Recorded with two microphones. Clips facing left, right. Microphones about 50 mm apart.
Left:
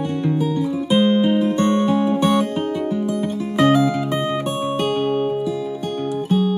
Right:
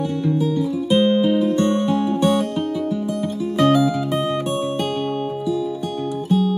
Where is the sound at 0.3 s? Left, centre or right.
Centre.